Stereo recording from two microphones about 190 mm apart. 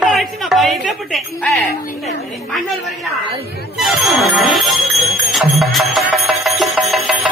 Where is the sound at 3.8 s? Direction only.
Centre (ahead or behind).